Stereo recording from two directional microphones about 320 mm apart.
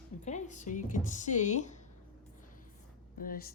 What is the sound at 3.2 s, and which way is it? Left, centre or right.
Speech, left.